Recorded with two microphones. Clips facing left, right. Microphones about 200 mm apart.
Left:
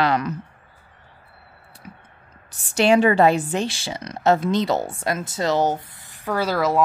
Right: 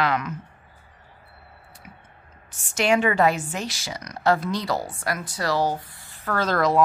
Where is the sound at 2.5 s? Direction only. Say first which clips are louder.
Left 5 dB; 35° left (ahead or behind).